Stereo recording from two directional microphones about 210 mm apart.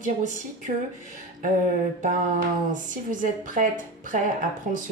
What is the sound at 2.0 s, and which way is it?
Speech, 35° right (ahead or behind).